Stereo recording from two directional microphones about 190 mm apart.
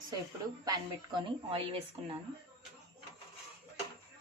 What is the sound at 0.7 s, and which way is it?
A woman's voice, 25° right (ahead or behind).